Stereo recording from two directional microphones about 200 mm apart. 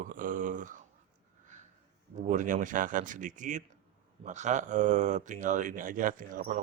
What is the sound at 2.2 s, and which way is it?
Speech, 40° right (ahead or behind).